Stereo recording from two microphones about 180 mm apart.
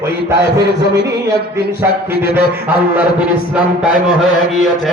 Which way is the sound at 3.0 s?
5° right (ahead or behind).